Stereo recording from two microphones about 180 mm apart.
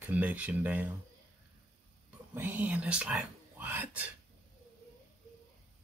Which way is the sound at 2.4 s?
10° right (ahead or behind).